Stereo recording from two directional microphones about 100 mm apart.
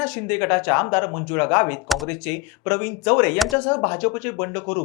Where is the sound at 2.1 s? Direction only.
15° left (ahead or behind).